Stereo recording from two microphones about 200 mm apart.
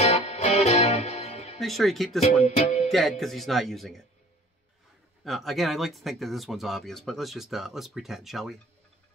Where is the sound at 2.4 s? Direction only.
35° left (ahead or behind).